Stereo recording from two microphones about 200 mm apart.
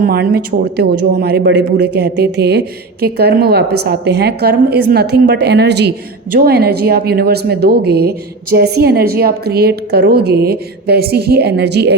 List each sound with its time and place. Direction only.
0.0 s speech: 50° right (ahead or behind)